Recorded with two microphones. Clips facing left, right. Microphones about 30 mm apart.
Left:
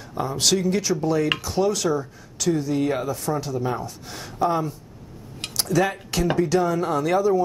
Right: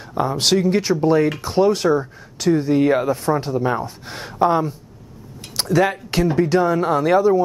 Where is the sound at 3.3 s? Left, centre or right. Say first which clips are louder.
Right 6 dB; right.